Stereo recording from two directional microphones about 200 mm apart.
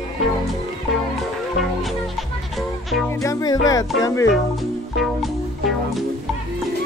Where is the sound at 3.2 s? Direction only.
15° left (ahead or behind).